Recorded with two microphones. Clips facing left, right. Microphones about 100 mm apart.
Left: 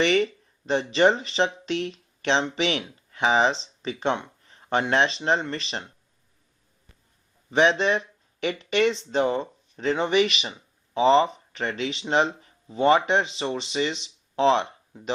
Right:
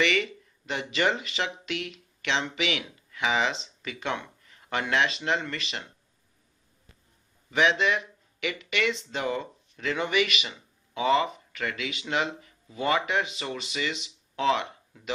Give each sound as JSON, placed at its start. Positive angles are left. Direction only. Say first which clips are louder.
{"t": 0.0, "sound": "speech", "louder": "left 5 dB", "side_deg": 35}
{"t": 7.5, "sound": "speech", "louder": "left 4 dB", "side_deg": 35}